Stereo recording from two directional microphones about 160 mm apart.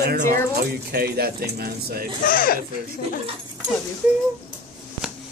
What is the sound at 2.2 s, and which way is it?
Speech, 60° left (ahead or behind).